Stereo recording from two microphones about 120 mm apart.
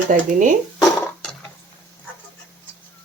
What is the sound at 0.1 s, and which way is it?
Speech, 90° right.